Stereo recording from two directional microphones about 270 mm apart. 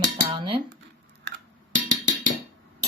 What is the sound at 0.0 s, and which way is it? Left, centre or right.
Cutlery, centre.